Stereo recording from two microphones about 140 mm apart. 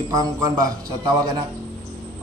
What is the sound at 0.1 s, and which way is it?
A man's voice, 25° right (ahead or behind).